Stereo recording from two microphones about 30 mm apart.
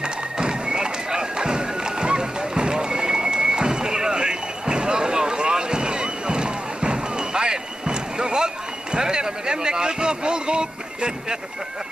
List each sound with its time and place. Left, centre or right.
0.0 s music: right
8.9 s speech: right